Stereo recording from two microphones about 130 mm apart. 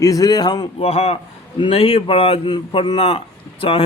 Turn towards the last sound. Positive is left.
turn(degrees=45)  # may be behind; listen again after turning